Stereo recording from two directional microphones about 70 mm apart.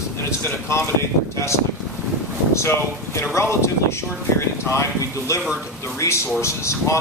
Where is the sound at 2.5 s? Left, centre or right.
Left.